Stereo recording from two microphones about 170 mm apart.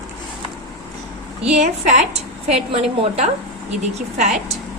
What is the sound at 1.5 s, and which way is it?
A woman's voice, 40° right (ahead or behind).